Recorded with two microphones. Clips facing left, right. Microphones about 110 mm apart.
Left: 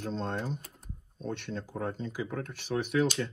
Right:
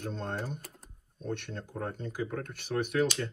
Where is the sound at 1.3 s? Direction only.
55° right (ahead or behind).